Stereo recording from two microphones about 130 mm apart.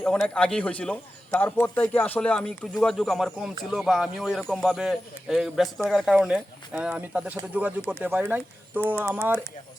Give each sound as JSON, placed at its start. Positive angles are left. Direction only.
{"t": 0.0, "sound": "a man's voice", "side_deg": 5}